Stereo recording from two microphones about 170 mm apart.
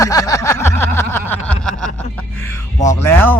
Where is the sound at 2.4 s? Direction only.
15° left (ahead or behind).